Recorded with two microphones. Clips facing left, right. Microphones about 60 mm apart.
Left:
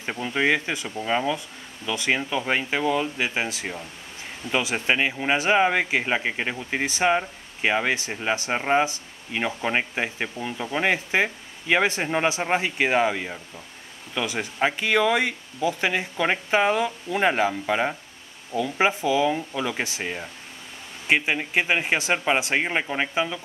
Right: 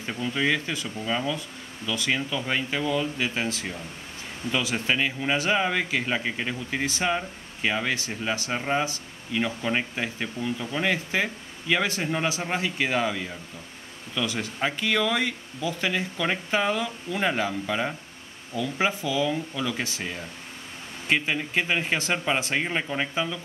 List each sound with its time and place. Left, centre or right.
0.0 s speech: left